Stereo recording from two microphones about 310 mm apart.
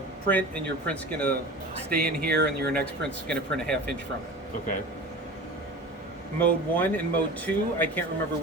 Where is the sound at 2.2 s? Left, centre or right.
Right.